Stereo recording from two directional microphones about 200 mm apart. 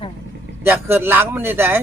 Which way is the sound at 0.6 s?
10° right (ahead or behind).